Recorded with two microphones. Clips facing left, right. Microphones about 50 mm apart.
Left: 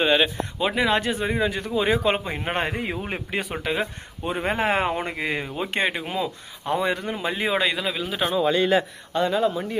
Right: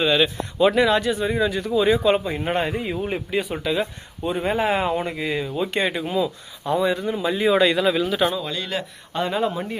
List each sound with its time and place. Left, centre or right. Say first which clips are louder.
0.0 s a man's voice: right 1 dB; left
0.6 s speech: right 6 dB; centre
0.9 s speech: right 2 dB; left
2.6 s a man's voice: right 3 dB; left
7.7 s speech: right 7 dB; centre
8.1 s speech: right 4 dB; centre
8.4 s a man's voice: left 8 dB; left
9.1 s speech: left 1 dB; centre